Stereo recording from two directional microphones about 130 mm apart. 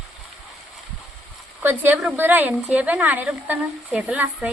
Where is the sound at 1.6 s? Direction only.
15° right (ahead or behind).